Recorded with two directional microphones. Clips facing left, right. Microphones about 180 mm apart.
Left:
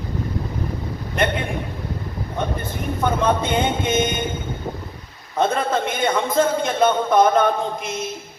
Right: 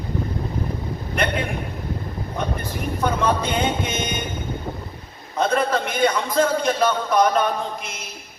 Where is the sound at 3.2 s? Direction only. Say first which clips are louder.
Left 3 dB; 25° left (ahead or behind).